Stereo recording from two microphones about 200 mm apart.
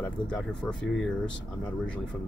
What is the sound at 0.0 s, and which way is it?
Speech, 5° left (ahead or behind).